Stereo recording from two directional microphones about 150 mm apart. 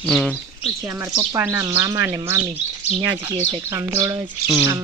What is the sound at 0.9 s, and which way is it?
Speech, 20° right (ahead or behind).